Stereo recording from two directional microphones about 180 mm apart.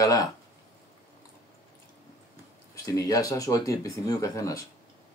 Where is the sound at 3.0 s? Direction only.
20° left (ahead or behind).